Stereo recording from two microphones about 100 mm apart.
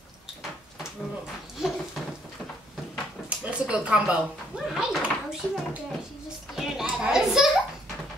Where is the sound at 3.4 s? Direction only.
10° right (ahead or behind).